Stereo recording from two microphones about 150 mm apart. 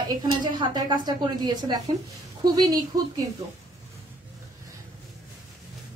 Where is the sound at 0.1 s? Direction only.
30° right (ahead or behind).